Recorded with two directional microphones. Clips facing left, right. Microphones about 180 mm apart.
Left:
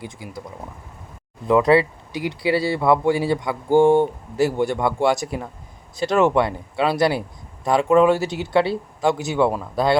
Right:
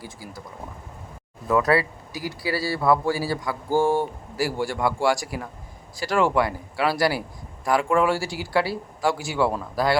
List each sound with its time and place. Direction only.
0.0 s speech: 20° left (ahead or behind)
1.5 s speech: 20° left (ahead or behind)